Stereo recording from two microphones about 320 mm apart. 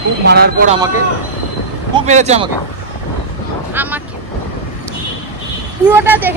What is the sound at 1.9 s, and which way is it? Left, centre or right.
Speech, right.